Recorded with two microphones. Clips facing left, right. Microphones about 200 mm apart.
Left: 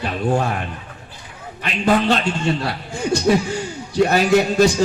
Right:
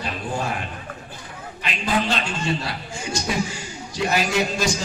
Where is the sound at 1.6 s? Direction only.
60° left (ahead or behind).